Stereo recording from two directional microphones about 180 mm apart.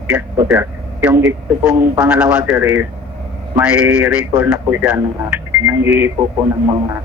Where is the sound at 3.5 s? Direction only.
5° right (ahead or behind).